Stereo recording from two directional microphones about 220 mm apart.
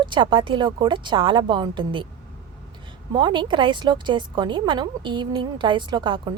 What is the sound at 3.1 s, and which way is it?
A woman's voice, 20° right (ahead or behind).